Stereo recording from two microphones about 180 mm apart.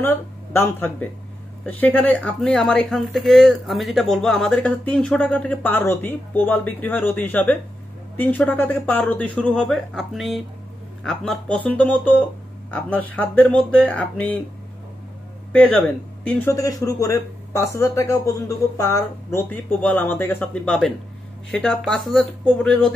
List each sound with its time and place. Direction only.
0.0 s speech: 15° left (ahead or behind)
15.5 s a man's voice: 5° left (ahead or behind)